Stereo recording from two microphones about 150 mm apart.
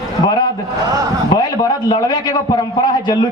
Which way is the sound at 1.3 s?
25° left (ahead or behind).